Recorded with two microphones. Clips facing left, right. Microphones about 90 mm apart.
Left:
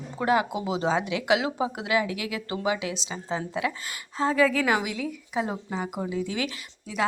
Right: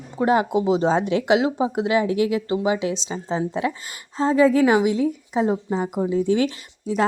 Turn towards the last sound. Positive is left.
turn(degrees=-35)  # may be behind; listen again after turning